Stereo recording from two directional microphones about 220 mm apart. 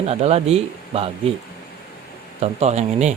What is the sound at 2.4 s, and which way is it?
Speech, 30° right (ahead or behind).